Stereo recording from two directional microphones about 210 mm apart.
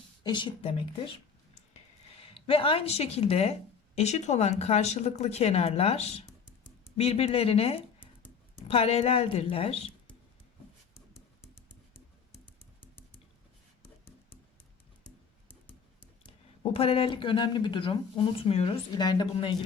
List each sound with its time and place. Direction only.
0.2 s speech: 20° left (ahead or behind)
1.7 s a sound: 25° left (ahead or behind)
3.9 s speech: 30° left (ahead or behind)
15.4 s computer keyboard: 10° left (ahead or behind)
16.2 s speech: 25° left (ahead or behind)